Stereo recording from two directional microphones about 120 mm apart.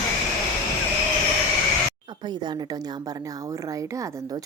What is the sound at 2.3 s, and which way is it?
A woman's voice, 35° right (ahead or behind).